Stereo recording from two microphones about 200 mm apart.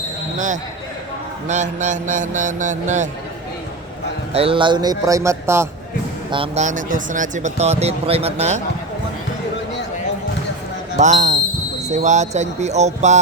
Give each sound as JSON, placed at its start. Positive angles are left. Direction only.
{"t": 0.3, "sound": "speech", "side_deg": -40}
{"t": 4.3, "sound": "speech", "side_deg": -30}
{"t": 6.3, "sound": "speech", "side_deg": -30}
{"t": 10.9, "sound": "speech", "side_deg": -40}